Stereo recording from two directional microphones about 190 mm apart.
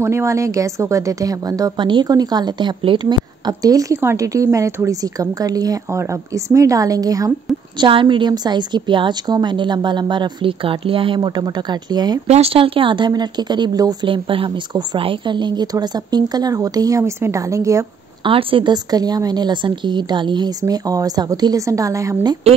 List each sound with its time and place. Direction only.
0.0 s a woman's voice: 15° right (ahead or behind)
12.3 s speech: 30° right (ahead or behind); by 18.3 s 15° right (ahead or behind)
18.3 s speech: 25° right (ahead or behind)